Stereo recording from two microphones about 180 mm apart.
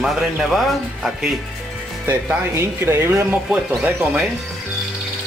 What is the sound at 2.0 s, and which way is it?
Speech, 15° right (ahead or behind).